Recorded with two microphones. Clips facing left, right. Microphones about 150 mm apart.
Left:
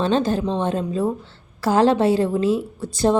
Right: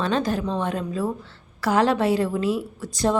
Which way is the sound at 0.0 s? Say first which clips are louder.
Left 4 dB; 30° left (ahead or behind).